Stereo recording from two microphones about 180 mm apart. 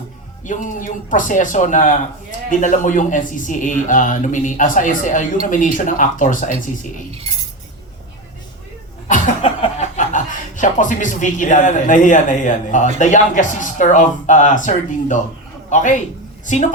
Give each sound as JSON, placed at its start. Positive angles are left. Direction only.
{"t": 0.4, "sound": "speech", "side_deg": 45}
{"t": 9.0, "sound": "a sound", "side_deg": 45}
{"t": 9.4, "sound": "speech", "side_deg": 35}